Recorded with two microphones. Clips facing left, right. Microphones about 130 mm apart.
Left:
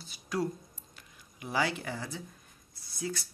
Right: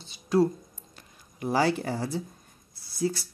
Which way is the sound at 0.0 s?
25° right (ahead or behind).